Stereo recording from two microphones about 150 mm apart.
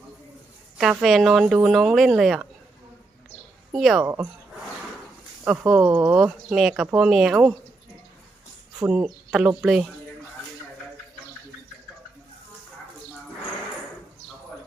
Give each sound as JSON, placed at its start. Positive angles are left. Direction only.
{"t": 0.8, "sound": "speech", "side_deg": 0}
{"t": 3.7, "sound": "a woman's voice", "side_deg": 0}
{"t": 4.0, "sound": "speech", "side_deg": -15}
{"t": 5.5, "sound": "speech", "side_deg": -5}
{"t": 8.9, "sound": "speech", "side_deg": -5}